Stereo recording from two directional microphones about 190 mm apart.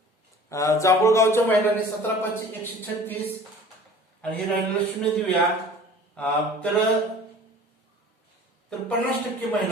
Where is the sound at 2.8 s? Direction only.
10° left (ahead or behind).